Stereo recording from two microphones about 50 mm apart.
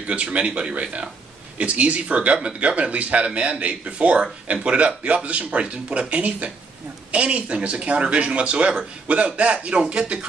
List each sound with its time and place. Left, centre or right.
0.0 s speech: right